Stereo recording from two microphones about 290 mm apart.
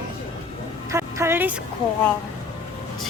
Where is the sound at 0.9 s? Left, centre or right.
Centre.